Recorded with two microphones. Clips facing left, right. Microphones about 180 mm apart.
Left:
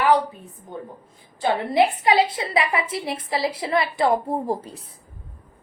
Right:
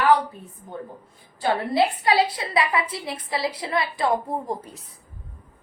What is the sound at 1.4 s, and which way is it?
A woman's voice, 20° left (ahead or behind).